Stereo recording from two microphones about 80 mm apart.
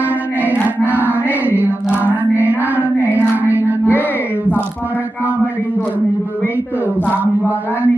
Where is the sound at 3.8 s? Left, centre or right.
Left.